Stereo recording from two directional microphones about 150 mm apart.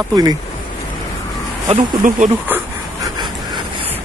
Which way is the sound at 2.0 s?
70° right (ahead or behind).